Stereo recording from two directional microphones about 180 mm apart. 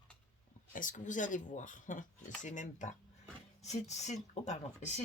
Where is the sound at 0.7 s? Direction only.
45° left (ahead or behind).